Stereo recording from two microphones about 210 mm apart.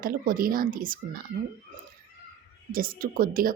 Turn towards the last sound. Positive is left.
turn(degrees=-40)  # may be behind; listen again after turning